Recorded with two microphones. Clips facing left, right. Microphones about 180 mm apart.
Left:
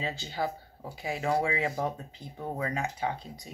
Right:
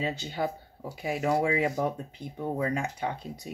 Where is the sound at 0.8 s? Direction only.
45° right (ahead or behind).